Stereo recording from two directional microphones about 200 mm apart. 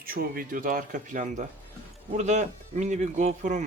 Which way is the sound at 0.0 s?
45° right (ahead or behind).